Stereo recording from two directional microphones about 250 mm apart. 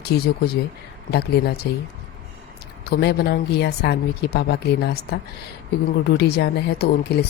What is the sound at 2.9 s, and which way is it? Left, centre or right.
A woman's voice, left.